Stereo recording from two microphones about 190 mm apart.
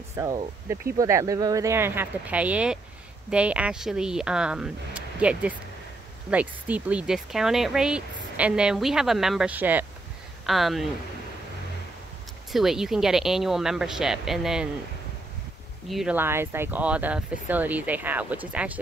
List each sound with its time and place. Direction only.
0.1 s speech: 15° right (ahead or behind); by 10.9 s centre (ahead or behind)
12.5 s speech: centre (ahead or behind)
15.9 s speech: 5° right (ahead or behind)